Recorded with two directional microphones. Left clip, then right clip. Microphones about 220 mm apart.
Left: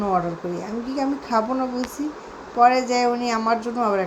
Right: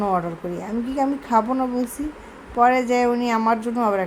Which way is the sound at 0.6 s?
5° left (ahead or behind).